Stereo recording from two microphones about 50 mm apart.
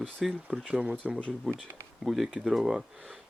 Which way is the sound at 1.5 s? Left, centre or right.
Centre.